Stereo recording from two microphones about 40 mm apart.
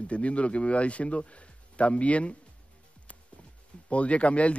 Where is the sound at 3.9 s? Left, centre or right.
Left.